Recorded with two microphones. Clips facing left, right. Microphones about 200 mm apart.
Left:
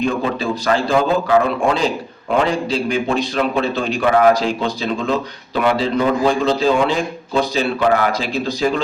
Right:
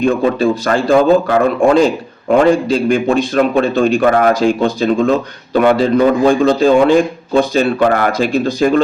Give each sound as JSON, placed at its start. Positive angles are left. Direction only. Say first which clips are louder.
{"t": 0.0, "sound": "a man's voice", "louder": "right 7 dB", "side_deg": -50}